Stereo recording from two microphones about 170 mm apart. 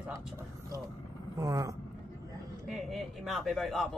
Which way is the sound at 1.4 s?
20° right (ahead or behind).